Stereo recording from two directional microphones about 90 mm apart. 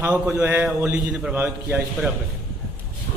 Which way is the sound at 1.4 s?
25° right (ahead or behind).